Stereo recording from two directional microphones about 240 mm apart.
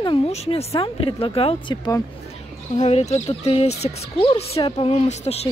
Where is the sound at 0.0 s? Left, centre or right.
Left.